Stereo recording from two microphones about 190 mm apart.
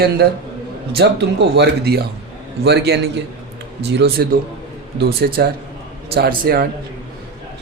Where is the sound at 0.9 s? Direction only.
60° right (ahead or behind).